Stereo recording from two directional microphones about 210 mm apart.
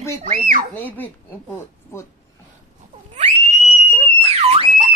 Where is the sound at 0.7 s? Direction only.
10° left (ahead or behind).